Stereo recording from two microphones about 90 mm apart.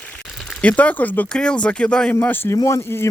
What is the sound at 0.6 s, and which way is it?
Speech, 15° left (ahead or behind).